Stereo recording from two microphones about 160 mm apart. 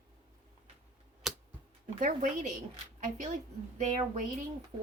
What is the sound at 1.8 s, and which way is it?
Speech, 50° right (ahead or behind).